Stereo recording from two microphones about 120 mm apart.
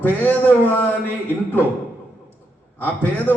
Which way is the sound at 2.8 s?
15° left (ahead or behind).